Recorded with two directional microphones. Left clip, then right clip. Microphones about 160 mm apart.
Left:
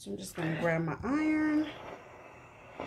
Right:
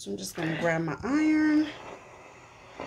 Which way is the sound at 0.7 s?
15° right (ahead or behind).